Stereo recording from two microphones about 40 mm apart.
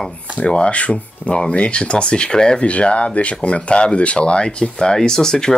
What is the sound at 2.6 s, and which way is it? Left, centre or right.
Speech, left.